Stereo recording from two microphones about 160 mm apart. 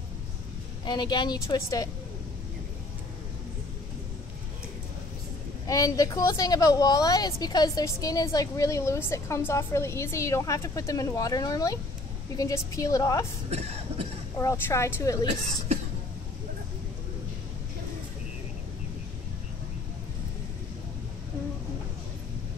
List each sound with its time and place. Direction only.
0.8 s a woman's voice: 30° left (ahead or behind)
5.7 s a woman's voice: 20° left (ahead or behind)
13.5 s a sound: 40° right (ahead or behind)
14.4 s a woman's voice: 20° left (ahead or behind)